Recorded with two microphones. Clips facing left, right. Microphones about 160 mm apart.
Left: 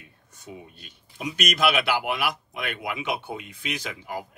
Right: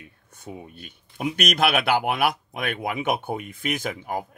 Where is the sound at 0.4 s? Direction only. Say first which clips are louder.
Right 4 dB; 55° right (ahead or behind).